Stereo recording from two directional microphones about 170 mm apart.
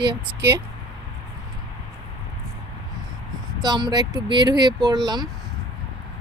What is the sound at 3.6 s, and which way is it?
Speech, 25° right (ahead or behind).